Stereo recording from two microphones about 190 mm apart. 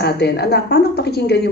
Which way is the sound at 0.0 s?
60° left (ahead or behind).